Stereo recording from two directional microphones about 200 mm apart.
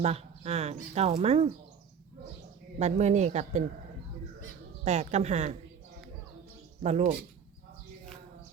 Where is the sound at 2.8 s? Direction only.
35° right (ahead or behind).